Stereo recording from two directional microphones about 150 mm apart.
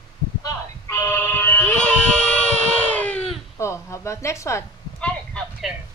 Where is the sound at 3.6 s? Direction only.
20° left (ahead or behind).